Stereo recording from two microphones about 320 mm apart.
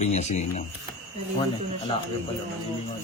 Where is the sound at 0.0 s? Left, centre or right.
Left.